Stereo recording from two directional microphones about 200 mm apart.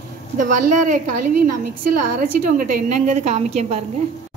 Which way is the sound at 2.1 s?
40° right (ahead or behind).